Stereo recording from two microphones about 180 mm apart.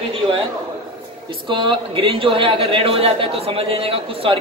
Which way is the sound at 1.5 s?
30° right (ahead or behind).